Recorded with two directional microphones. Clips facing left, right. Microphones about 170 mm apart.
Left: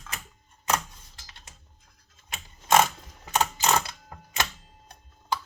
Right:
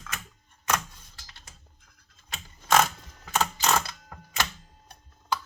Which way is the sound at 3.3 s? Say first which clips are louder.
Left 1 dB; 25° left (ahead or behind).